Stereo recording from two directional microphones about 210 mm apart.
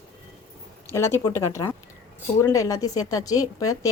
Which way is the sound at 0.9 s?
15° left (ahead or behind).